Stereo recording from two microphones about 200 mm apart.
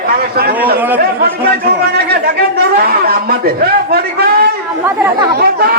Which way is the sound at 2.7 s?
50° right (ahead or behind).